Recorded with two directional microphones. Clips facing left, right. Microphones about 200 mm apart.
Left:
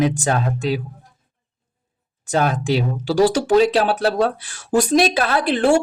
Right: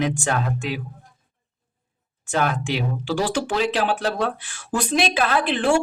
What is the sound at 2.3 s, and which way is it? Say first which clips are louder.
Speech: left 4 dB; 35° left (ahead or behind).